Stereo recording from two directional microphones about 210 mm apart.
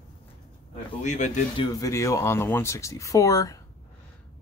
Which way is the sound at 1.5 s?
15° left (ahead or behind).